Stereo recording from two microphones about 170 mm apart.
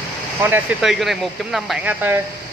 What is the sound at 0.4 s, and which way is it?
Speech, 5° right (ahead or behind).